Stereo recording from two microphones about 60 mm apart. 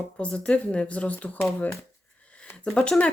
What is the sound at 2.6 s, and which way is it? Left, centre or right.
Speech, centre.